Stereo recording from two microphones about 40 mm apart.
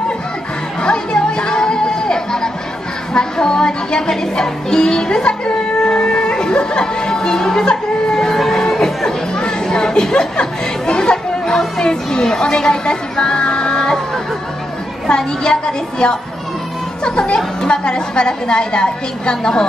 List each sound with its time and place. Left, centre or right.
0.8 s music: left
7.6 s speech: centre
8.2 s a sound: centre
9.4 s chatter: centre
15.0 s a woman's voice: centre
17.0 s music: left
17.6 s a woman's voice: left